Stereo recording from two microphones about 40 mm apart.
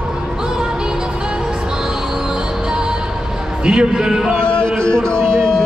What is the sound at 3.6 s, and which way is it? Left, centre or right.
Speech, right.